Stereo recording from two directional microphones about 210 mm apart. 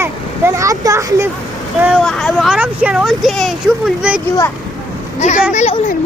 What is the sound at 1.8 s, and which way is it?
Speech, centre (ahead or behind).